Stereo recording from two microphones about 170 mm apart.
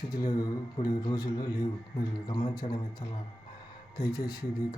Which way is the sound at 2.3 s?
25° left (ahead or behind).